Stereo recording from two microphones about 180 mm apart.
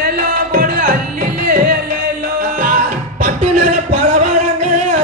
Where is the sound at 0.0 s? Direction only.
50° right (ahead or behind).